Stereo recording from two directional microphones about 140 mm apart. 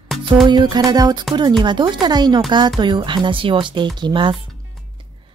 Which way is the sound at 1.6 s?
30° right (ahead or behind).